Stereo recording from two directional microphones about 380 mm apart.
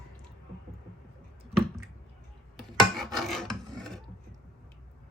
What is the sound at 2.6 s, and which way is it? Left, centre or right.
Filing, centre.